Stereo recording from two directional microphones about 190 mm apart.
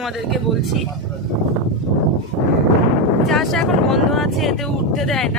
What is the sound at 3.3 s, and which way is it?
Speech, centre (ahead or behind).